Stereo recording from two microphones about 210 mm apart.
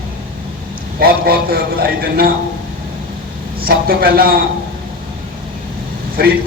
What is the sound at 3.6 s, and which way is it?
Speech, 45° right (ahead or behind).